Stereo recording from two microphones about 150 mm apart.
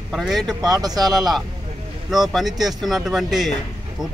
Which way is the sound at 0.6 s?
25° right (ahead or behind).